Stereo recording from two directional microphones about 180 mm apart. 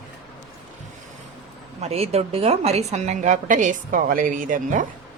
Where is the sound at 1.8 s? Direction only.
35° right (ahead or behind).